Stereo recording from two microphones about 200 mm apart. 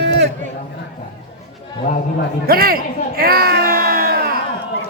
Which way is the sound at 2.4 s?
50° right (ahead or behind).